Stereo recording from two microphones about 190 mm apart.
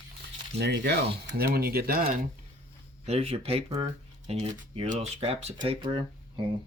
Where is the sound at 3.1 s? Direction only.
30° right (ahead or behind).